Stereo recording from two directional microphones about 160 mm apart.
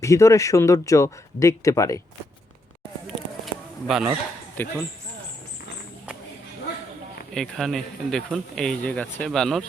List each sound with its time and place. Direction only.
0.0 s speech: 20° left (ahead or behind)
3.2 s bee: centre (ahead or behind)
4.6 s speech: 15° left (ahead or behind)
7.3 s speech: 5° left (ahead or behind)